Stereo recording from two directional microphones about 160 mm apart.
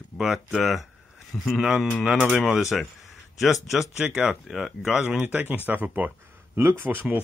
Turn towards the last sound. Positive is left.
turn(degrees=-10)  # may be behind; listen again after turning